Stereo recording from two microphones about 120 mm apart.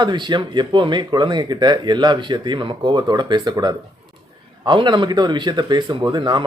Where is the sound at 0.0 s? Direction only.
40° right (ahead or behind).